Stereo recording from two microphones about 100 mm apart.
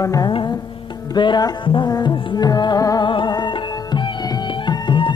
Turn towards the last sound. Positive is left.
turn(degrees=50)  # may be behind; listen again after turning